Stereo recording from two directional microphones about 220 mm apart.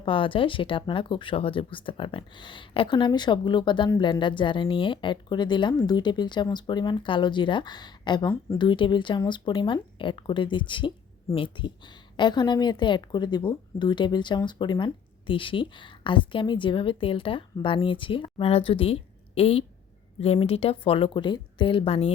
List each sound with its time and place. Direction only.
0.0 s speech: 25° left (ahead or behind)